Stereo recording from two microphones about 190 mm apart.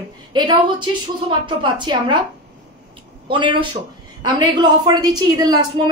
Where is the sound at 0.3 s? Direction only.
25° right (ahead or behind).